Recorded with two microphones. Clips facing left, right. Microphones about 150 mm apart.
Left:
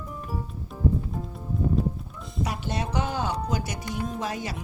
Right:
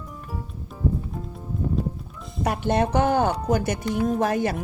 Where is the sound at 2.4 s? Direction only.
55° right (ahead or behind).